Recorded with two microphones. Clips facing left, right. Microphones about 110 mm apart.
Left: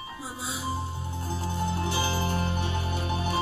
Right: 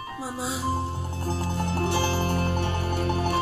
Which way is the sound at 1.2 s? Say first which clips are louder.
Right 2 dB; 75° right (ahead or behind).